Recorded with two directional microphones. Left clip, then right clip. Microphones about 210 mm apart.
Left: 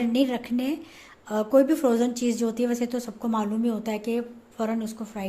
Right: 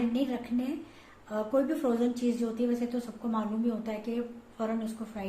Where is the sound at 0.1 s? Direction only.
45° left (ahead or behind).